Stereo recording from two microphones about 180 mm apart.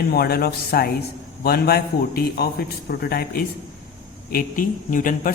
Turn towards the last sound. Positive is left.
turn(degrees=50)  # may be behind; listen again after turning